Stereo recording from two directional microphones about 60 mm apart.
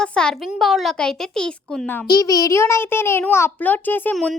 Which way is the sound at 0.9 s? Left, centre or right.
Centre.